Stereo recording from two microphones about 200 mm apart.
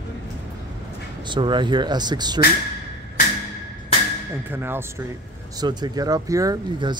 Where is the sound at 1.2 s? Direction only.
25° right (ahead or behind).